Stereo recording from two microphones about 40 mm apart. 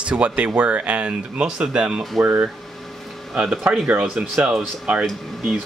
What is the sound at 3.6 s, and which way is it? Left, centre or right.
Speech, right.